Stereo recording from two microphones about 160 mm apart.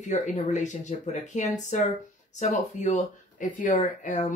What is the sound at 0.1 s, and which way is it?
Speech, 50° left (ahead or behind).